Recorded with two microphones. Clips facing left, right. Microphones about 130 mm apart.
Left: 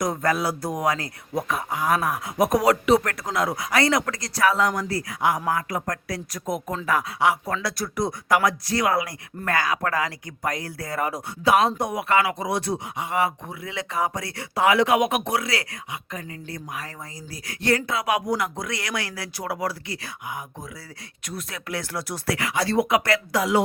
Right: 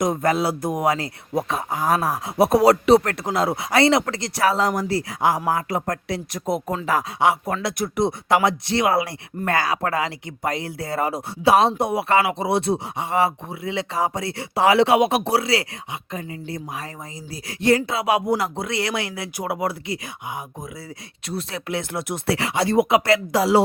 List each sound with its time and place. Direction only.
0.0 s speech: 20° right (ahead or behind)